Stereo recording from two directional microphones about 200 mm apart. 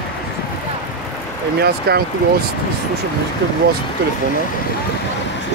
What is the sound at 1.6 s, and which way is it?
Speech, 50° right (ahead or behind).